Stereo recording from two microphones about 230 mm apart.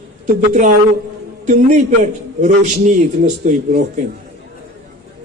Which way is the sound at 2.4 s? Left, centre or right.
Right.